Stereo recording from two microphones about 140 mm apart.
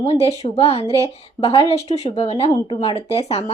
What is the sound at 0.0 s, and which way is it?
A woman's voice, 45° left (ahead or behind).